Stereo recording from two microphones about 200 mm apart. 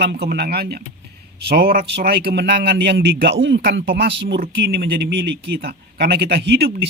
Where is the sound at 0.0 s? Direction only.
55° right (ahead or behind).